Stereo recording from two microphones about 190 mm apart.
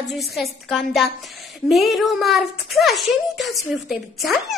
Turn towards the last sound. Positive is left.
turn(degrees=0)  # may be behind; listen again after turning